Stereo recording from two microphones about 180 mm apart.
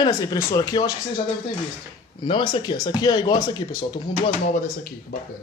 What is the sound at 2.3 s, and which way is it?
Speech, 25° left (ahead or behind).